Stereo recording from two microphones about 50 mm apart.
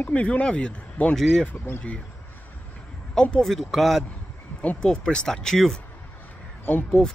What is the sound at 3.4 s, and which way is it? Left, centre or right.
Speech, centre.